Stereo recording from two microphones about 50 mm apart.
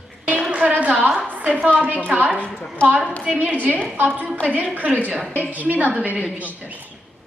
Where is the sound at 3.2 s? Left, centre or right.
Right.